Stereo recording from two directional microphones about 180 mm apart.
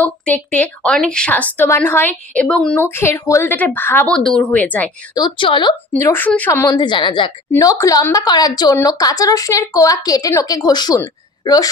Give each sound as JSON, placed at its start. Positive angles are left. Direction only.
{"t": 0.0, "sound": "a woman's voice", "side_deg": 10}
{"t": 5.1, "sound": "a woman's voice", "side_deg": 25}
{"t": 5.9, "sound": "a woman's voice", "side_deg": 10}